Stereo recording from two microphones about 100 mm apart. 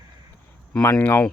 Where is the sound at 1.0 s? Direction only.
20° left (ahead or behind).